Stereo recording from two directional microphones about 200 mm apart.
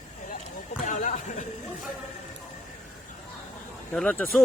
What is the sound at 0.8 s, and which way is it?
Speech, 40° left (ahead or behind).